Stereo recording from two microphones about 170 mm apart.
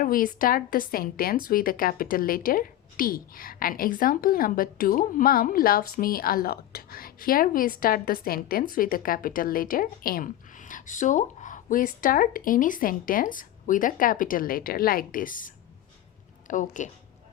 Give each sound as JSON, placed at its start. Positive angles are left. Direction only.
{"t": 0.0, "sound": "a woman's voice", "side_deg": 55}